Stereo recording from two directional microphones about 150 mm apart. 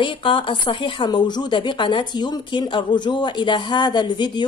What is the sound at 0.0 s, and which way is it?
A woman's voice, 35° left (ahead or behind).